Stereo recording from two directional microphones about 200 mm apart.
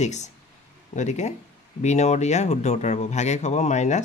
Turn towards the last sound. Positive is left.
turn(degrees=35)  # may be behind; listen again after turning